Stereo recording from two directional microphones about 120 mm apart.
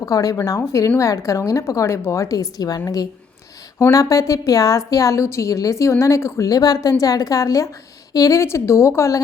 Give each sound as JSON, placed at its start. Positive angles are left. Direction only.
{"t": 0.0, "sound": "a woman's voice", "side_deg": 30}